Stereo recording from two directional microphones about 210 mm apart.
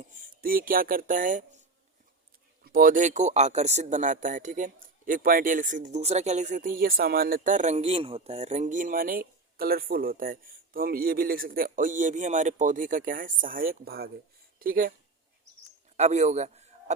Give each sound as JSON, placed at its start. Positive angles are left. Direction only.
{"t": 0.1, "sound": "speech", "side_deg": -40}
{"t": 2.6, "sound": "speech", "side_deg": -40}
{"t": 16.0, "sound": "a man's voice", "side_deg": -30}